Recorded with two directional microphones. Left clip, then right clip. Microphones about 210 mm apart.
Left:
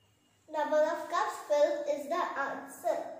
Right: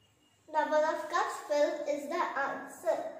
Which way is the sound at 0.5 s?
20° right (ahead or behind).